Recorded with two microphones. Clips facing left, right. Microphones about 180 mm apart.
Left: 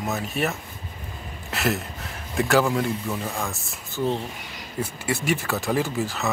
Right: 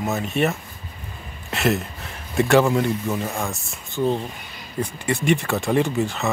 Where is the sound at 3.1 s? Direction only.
15° right (ahead or behind).